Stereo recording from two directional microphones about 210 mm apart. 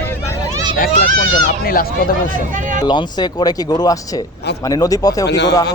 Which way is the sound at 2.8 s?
20° left (ahead or behind).